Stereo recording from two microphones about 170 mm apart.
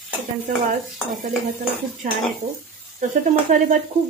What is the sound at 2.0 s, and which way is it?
Speech, 50° right (ahead or behind).